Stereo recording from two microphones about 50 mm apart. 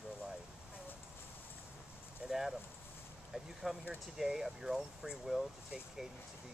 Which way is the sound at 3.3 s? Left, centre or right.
Centre.